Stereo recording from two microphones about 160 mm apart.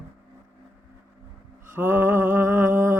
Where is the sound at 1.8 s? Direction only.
15° right (ahead or behind).